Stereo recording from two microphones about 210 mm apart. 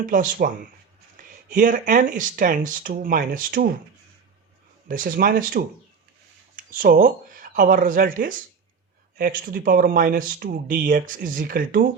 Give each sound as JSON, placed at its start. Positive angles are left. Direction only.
{"t": 0.0, "sound": "speech", "side_deg": -40}
{"t": 4.9, "sound": "speech", "side_deg": -40}